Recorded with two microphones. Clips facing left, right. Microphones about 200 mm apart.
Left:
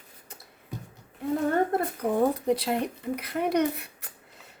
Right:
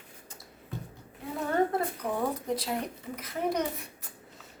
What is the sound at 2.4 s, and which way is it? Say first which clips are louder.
Speech: left 6 dB; 65° left (ahead or behind).